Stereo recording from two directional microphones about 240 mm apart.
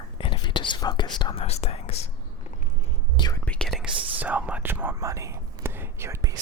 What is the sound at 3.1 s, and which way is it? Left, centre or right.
Whispering, centre.